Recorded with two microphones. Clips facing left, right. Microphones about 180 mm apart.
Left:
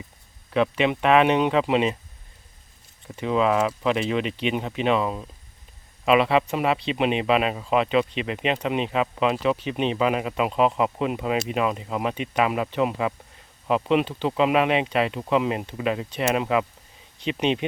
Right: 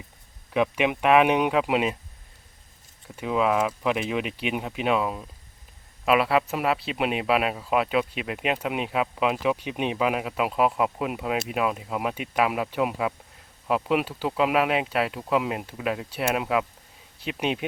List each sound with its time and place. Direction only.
0.5 s speech: 10° right (ahead or behind)
3.2 s speech: 5° right (ahead or behind)